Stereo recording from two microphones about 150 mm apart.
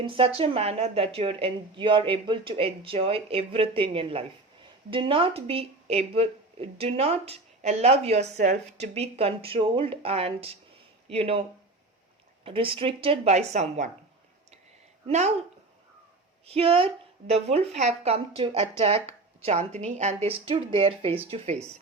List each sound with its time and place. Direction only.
0.0 s speech: 35° right (ahead or behind)
12.5 s speech: 35° right (ahead or behind); by 13.9 s 50° right (ahead or behind)
15.0 s a woman's voice: 45° right (ahead or behind)
16.5 s a woman's voice: 40° right (ahead or behind)